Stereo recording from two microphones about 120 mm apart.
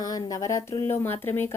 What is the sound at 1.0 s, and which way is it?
Speech, 20° left (ahead or behind).